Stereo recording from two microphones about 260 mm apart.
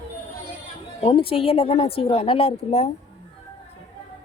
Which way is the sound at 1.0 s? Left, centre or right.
Left.